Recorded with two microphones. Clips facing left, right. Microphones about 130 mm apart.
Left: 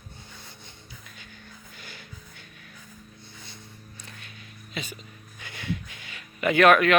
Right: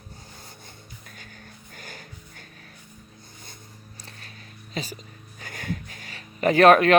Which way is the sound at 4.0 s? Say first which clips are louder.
Right 1 dB; 35° right (ahead or behind).